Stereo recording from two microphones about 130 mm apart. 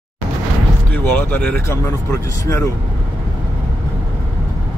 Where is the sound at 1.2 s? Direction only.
15° left (ahead or behind).